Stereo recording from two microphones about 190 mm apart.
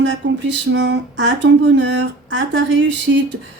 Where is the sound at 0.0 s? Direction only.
75° right (ahead or behind).